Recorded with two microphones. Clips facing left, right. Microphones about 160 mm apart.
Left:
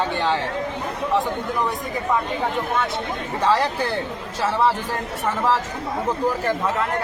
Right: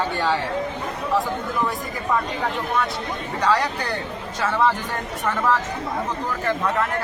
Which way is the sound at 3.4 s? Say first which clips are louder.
Left 2 dB; 30° left (ahead or behind).